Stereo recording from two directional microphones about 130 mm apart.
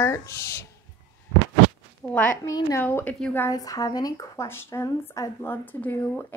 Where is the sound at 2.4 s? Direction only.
25° left (ahead or behind).